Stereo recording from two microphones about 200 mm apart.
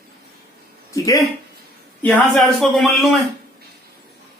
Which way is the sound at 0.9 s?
15° left (ahead or behind).